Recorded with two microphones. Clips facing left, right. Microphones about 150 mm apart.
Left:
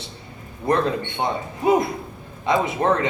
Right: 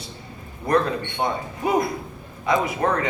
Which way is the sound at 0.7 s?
25° left (ahead or behind).